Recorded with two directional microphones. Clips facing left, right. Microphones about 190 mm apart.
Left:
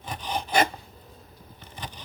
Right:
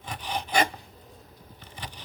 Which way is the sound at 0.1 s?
40° left (ahead or behind).